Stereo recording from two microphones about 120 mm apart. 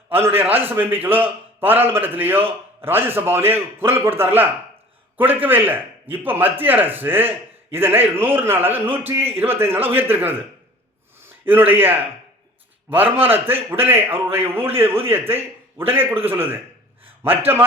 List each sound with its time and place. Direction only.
0.1 s a man's voice: 20° right (ahead or behind)